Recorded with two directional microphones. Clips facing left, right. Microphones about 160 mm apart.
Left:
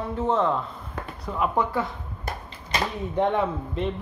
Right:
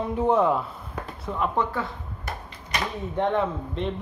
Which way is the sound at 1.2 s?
5° left (ahead or behind).